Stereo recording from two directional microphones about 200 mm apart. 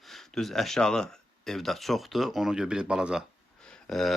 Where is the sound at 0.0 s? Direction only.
Centre (ahead or behind).